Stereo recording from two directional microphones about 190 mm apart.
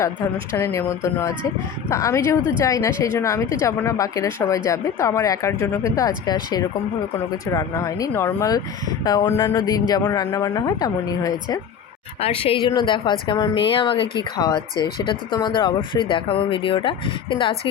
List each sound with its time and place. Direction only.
0.5 s a woman's voice: 15° left (ahead or behind)
12.2 s a woman's voice: 30° left (ahead or behind)